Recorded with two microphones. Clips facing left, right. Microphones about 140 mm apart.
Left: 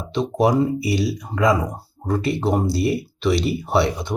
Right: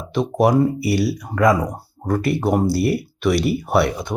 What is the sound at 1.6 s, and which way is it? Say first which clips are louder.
Speech: right 2 dB; centre (ahead or behind).